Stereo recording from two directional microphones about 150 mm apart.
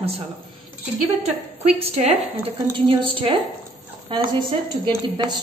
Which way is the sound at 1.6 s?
45° right (ahead or behind).